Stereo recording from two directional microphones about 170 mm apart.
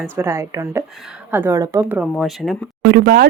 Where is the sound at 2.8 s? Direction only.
70° right (ahead or behind).